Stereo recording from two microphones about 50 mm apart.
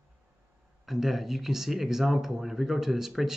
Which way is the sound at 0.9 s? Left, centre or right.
Centre.